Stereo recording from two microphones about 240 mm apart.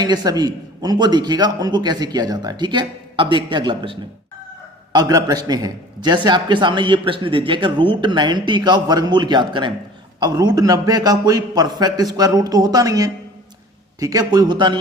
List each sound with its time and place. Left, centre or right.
0.0 s a man's voice: centre